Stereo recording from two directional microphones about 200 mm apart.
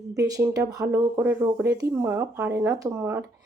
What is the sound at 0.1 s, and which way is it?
Speech, 15° right (ahead or behind).